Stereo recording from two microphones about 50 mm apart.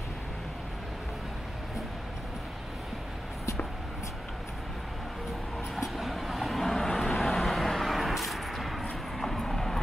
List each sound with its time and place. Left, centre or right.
5.8 s vehicle: centre